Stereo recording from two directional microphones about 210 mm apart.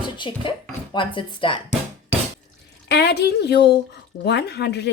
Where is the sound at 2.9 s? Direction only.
50° left (ahead or behind).